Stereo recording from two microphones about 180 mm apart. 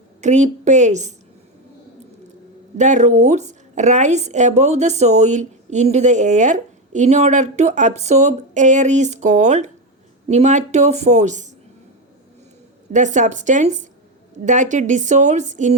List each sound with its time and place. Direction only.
0.2 s a woman's voice: 40° right (ahead or behind)
2.7 s a woman's voice: 40° right (ahead or behind)
12.9 s a woman's voice: 45° right (ahead or behind)